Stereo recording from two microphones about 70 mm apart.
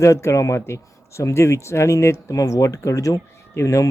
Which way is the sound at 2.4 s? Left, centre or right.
Left.